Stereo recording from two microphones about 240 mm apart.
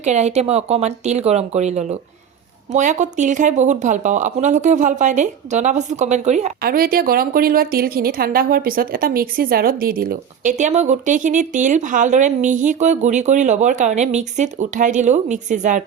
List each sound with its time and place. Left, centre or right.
0.0 s speech: right